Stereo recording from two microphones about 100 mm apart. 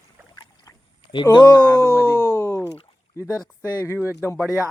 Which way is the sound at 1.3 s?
45° left (ahead or behind).